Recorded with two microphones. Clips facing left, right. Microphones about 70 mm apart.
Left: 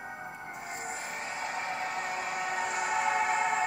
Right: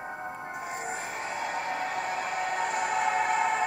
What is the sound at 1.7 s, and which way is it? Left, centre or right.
Music, right.